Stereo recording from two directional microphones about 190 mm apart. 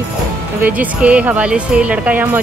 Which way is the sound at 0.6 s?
5° right (ahead or behind).